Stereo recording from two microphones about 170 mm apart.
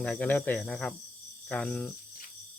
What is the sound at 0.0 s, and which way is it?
Speech, 10° left (ahead or behind).